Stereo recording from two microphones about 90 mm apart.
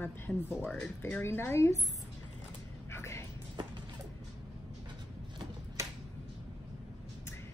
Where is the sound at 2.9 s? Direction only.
30° left (ahead or behind).